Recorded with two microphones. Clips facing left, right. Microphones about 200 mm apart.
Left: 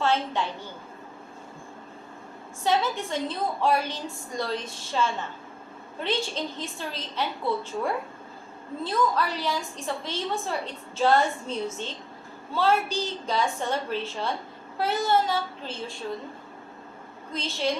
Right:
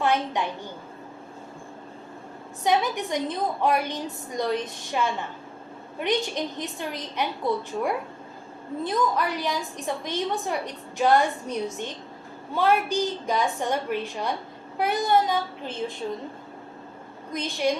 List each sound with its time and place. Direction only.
0.0 s a woman's voice: 15° right (ahead or behind)
2.6 s a woman's voice: 15° right (ahead or behind)
17.3 s a woman's voice: 15° right (ahead or behind)